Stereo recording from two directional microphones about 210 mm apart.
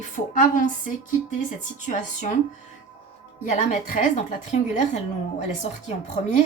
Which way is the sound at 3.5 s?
35° left (ahead or behind).